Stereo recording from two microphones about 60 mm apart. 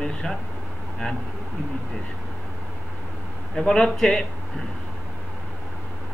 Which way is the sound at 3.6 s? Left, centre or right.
Centre.